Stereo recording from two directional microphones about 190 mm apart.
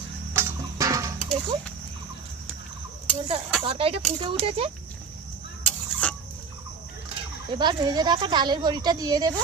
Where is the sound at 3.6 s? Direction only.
30° right (ahead or behind).